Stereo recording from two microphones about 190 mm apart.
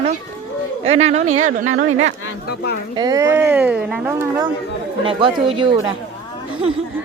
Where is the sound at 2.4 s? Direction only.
55° left (ahead or behind).